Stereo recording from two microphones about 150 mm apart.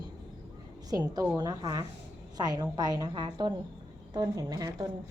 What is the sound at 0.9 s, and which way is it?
A woman's voice, 25° right (ahead or behind).